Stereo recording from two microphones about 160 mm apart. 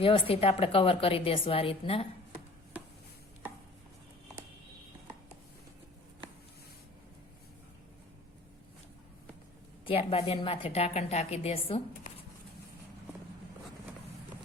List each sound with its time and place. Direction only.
0.0 s a woman's voice: 35° left (ahead or behind)
9.8 s a woman's voice: 35° left (ahead or behind)